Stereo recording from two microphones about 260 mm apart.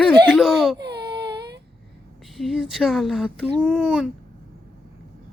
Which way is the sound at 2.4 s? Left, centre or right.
Centre.